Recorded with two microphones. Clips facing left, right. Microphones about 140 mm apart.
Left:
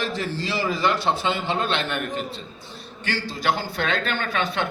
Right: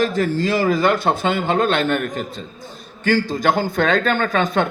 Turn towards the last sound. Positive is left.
turn(degrees=-45)  # may be behind; listen again after turning